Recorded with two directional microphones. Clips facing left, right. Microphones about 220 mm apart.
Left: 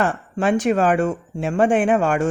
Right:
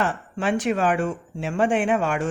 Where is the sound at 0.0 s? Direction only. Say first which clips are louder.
Left 4 dB; 45° left (ahead or behind).